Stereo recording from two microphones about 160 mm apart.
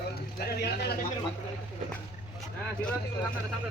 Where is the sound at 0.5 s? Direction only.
90° left.